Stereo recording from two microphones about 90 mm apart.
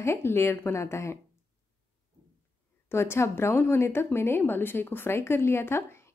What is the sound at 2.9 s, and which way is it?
A woman's voice, 30° left (ahead or behind).